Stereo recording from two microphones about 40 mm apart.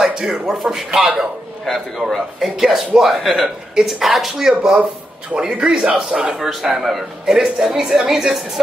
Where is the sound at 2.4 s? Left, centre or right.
Centre.